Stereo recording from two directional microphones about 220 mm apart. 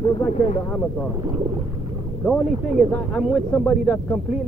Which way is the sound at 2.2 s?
Centre (ahead or behind).